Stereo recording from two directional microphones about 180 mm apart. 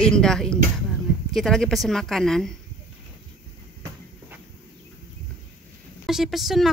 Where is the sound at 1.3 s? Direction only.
Centre (ahead or behind).